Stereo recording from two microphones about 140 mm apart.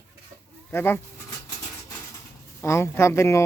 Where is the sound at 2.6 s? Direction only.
20° left (ahead or behind).